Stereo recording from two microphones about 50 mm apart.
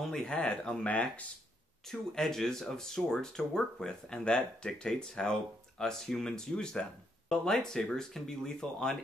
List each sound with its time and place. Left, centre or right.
0.3 s speech: left
1.9 s speech: centre